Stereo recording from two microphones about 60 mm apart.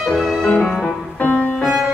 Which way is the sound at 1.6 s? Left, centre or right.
Centre.